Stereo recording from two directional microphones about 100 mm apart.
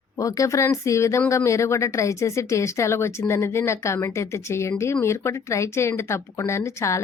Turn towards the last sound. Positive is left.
turn(degrees=30)  # may be behind; listen again after turning